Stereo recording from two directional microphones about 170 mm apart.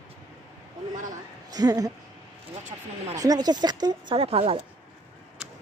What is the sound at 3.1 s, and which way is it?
Speech, 20° right (ahead or behind).